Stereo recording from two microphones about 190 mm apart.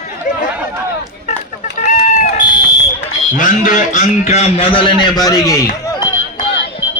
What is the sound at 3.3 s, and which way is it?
A man's voice, 45° left (ahead or behind).